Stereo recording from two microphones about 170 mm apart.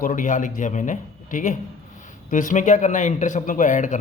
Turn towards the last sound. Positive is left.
turn(degrees=45)  # may be behind; listen again after turning